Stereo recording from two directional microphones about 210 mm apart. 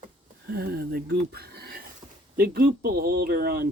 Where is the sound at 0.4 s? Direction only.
50° right (ahead or behind).